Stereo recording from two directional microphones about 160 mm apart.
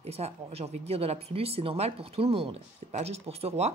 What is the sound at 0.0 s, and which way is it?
Speech, 40° right (ahead or behind).